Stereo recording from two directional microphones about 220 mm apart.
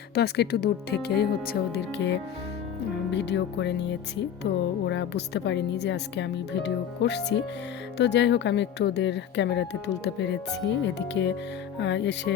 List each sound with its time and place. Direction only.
0.1 s speech: 45° left (ahead or behind)